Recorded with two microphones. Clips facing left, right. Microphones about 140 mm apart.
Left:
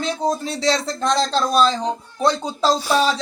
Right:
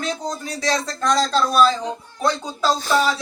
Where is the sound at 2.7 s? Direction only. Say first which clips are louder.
Even; 10° left (ahead or behind).